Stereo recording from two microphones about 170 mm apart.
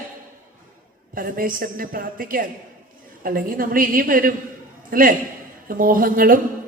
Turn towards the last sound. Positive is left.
turn(degrees=-60)  # may be behind; listen again after turning